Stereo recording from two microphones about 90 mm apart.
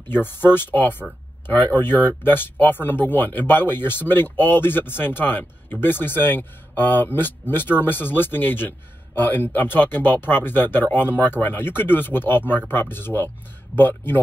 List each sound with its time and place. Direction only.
0.1 s speech: 25° left (ahead or behind)